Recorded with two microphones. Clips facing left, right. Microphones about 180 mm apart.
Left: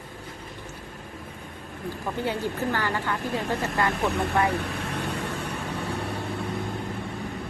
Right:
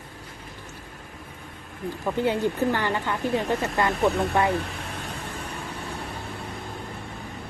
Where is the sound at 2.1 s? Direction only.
20° right (ahead or behind).